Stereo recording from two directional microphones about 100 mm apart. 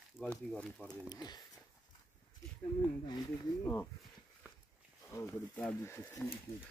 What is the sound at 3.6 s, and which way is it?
Speech, 20° left (ahead or behind).